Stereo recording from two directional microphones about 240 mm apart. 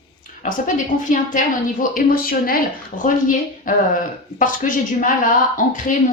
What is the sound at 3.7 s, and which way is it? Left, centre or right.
Speech, left.